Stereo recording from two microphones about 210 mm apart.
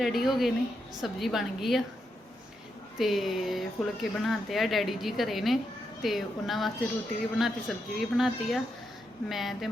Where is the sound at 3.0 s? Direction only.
Centre (ahead or behind).